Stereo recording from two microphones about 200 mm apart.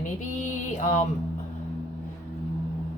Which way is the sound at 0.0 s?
40° left (ahead or behind).